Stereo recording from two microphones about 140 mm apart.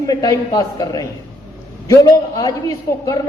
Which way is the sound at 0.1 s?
25° left (ahead or behind).